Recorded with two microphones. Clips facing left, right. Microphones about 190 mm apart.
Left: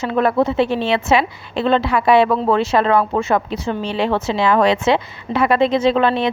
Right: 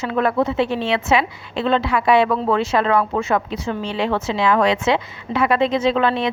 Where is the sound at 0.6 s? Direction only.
75° left (ahead or behind).